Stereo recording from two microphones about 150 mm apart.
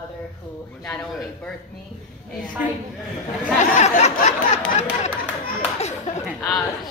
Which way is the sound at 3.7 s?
50° left (ahead or behind).